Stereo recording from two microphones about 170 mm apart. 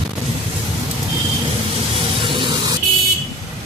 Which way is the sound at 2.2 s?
30° right (ahead or behind).